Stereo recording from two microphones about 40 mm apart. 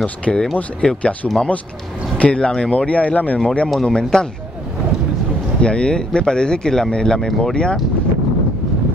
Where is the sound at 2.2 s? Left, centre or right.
Left.